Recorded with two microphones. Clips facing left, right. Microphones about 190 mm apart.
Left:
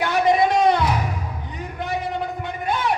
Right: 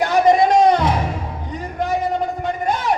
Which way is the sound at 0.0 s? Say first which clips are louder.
Right 4 dB; 45° right (ahead or behind).